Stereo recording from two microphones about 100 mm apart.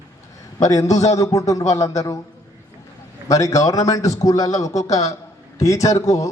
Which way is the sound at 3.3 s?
35° left (ahead or behind).